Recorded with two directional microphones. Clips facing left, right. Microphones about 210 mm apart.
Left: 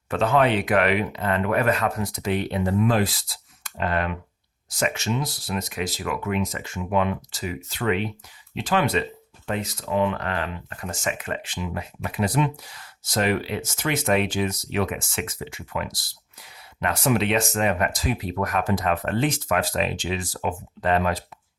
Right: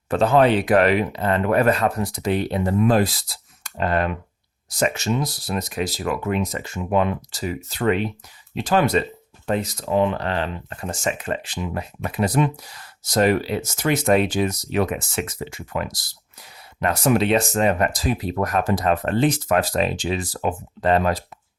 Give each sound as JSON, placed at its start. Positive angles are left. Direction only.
{"t": 0.1, "sound": "speech", "side_deg": -35}